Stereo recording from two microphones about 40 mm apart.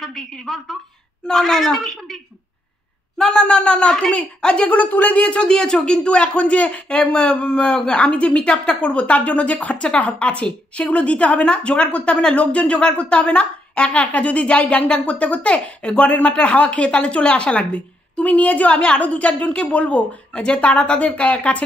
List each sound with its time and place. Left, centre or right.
0.0 s a woman's voice: centre
3.3 s speech: left
4.6 s a woman's voice: left
5.4 s a woman's voice: centre